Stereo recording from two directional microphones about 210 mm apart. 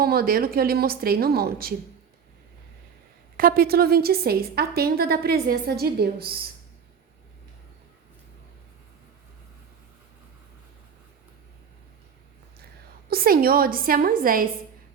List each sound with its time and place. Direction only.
0.0 s a woman's voice: 45° right (ahead or behind)
3.3 s a woman's voice: 45° right (ahead or behind)
13.1 s a woman's voice: 45° right (ahead or behind)